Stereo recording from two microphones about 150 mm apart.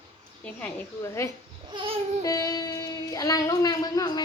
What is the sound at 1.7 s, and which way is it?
Babbling, 35° right (ahead or behind).